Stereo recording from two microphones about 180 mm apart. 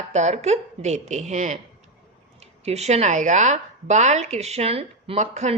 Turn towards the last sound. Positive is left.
turn(degrees=-40)  # may be behind; listen again after turning